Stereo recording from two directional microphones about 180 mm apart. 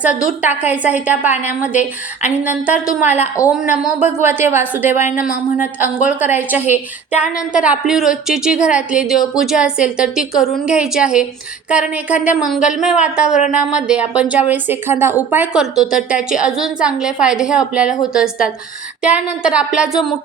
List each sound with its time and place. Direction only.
0.1 s a woman's voice: 50° left (ahead or behind)
0.4 s a woman's voice: 10° right (ahead or behind)